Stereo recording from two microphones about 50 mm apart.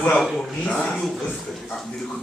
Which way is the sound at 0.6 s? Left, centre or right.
Left.